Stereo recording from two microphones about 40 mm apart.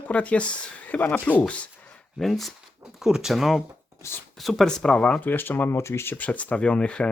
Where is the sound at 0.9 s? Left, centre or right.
Left.